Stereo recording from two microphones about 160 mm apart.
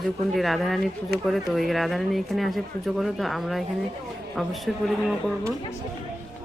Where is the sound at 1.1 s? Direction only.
90° right.